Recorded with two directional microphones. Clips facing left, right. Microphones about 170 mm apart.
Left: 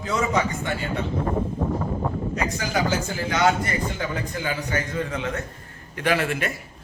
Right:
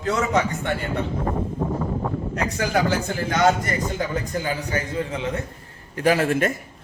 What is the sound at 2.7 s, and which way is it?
Speech, 50° right (ahead or behind).